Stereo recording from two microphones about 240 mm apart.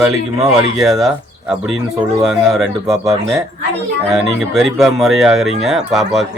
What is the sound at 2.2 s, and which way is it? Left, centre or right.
Speech, centre.